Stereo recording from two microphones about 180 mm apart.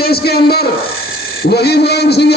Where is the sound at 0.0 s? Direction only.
60° left (ahead or behind).